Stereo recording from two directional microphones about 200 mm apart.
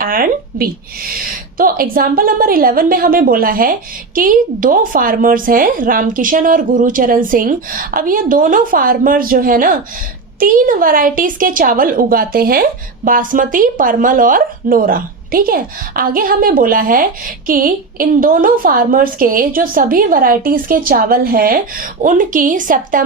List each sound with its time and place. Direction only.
0.0 s a woman's voice: 45° right (ahead or behind)